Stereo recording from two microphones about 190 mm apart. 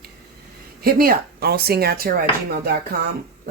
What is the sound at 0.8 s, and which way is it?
Speech, 50° right (ahead or behind).